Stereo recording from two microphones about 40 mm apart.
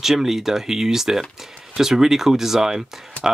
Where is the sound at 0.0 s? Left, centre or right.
Centre.